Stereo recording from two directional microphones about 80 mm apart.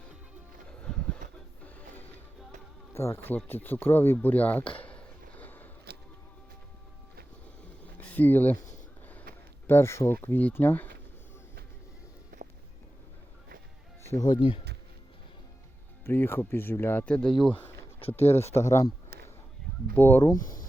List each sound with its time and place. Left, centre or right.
0.8 s a sound: centre
2.9 s speech: left
3.3 s speech: left
4.8 s a sound: centre
7.9 s a sound: left
9.6 s speech: left
10.2 s speech: left
14.2 s speech: left
16.0 s speech: left
18.3 s speech: left
20.0 s speech: left